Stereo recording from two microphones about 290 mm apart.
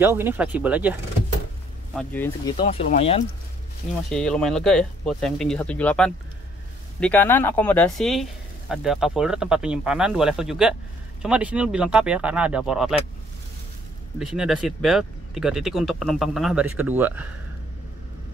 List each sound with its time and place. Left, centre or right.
0.0 s speech: centre
2.0 s speech: centre
4.1 s speech: centre
14.2 s speech: centre